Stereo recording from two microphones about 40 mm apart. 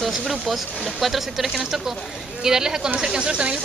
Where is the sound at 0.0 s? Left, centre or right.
Centre.